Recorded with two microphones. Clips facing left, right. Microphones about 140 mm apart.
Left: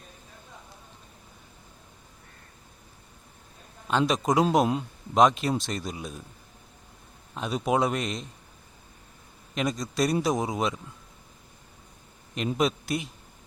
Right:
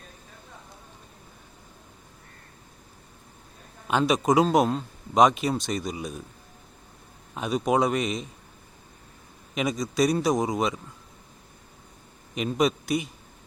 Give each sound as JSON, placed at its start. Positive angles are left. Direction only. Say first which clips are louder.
{"t": 3.8, "sound": "speech", "louder": "right 2 dB", "side_deg": -5}
{"t": 7.3, "sound": "speech", "louder": "right 2 dB", "side_deg": 0}
{"t": 9.6, "sound": "speech", "louder": "right 3 dB", "side_deg": 0}
{"t": 12.5, "sound": "speech", "louder": "right 2 dB", "side_deg": 0}